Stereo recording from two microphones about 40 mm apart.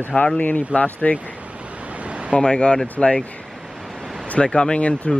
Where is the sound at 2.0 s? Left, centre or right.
Right.